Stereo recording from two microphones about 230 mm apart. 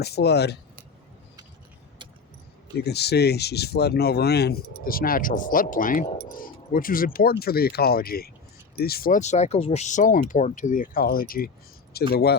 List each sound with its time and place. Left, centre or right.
0.0 s speech: left
2.7 s speech: left